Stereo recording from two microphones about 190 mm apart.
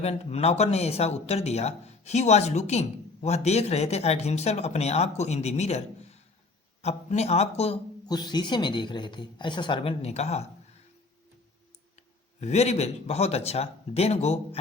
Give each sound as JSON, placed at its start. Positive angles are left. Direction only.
{"t": 0.0, "sound": "speech", "side_deg": 35}
{"t": 8.0, "sound": "speech", "side_deg": 20}
{"t": 12.4, "sound": "speech", "side_deg": 35}